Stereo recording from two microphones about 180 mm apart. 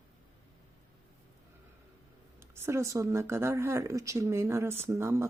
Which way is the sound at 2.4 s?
15° right (ahead or behind).